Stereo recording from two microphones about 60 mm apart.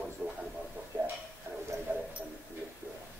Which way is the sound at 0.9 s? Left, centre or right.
Right.